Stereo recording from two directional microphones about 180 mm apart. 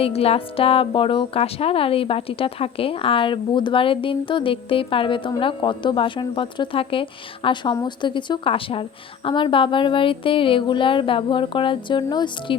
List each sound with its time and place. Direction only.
0.0 s speech: 35° left (ahead or behind)